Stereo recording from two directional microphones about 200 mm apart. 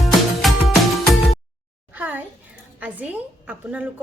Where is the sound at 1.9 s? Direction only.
10° right (ahead or behind).